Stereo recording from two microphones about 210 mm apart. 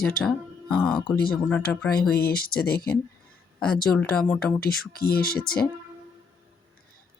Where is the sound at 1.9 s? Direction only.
45° left (ahead or behind).